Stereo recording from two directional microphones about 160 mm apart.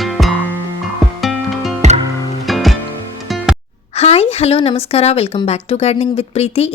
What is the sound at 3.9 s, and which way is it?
A woman's voice, 40° left (ahead or behind).